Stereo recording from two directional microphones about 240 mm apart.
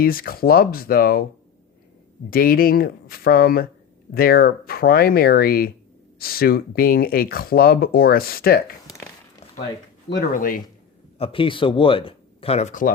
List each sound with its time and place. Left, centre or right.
0.0 s speech: left
2.3 s speech: left
10.3 s speech: left
11.2 s speech: left